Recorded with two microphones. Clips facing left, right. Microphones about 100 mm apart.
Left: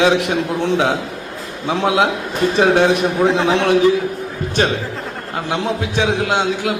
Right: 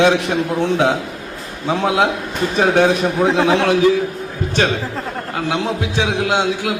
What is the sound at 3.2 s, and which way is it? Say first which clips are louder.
Speech: right 1 dB; 15° right (ahead or behind).